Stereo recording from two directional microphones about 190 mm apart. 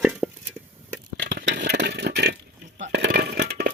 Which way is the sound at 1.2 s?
70° right (ahead or behind).